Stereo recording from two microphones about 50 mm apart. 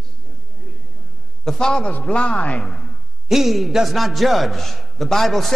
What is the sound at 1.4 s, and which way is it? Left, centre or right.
Speech, centre.